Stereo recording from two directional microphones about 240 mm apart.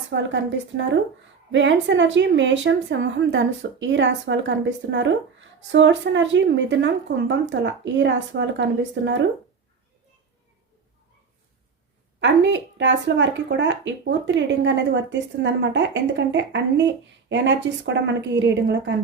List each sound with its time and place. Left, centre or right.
0.1 s a woman's voice: right
12.2 s a woman's voice: right